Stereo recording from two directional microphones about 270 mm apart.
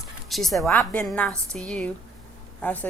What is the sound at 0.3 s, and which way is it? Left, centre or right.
Speech, centre.